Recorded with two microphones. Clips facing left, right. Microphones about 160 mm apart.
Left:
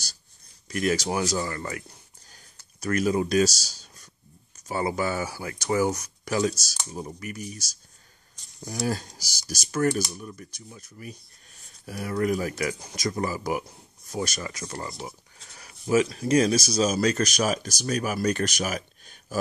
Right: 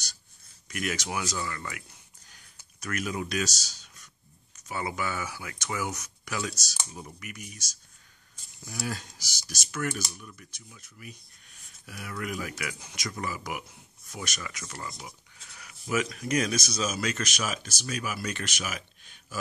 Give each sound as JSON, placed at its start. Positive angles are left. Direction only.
{"t": 0.7, "sound": "speech", "side_deg": 35}